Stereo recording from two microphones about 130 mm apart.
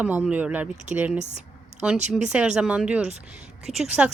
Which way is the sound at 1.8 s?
10° right (ahead or behind).